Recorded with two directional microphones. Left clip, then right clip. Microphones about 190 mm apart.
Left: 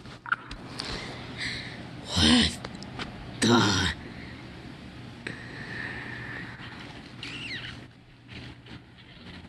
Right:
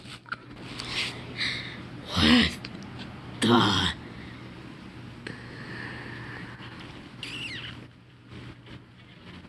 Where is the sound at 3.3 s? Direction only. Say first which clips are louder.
Right 1 dB; centre (ahead or behind).